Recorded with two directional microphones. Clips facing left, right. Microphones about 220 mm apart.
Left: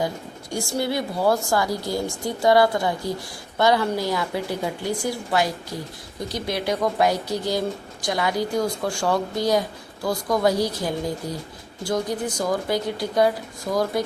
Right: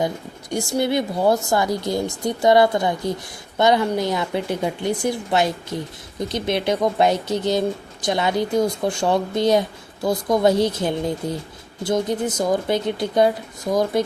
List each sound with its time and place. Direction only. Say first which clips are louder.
0.5 s a woman's voice: right 4 dB; 20° right (ahead or behind)